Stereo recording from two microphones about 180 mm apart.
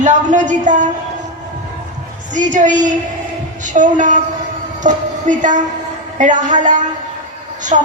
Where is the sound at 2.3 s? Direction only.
45° right (ahead or behind).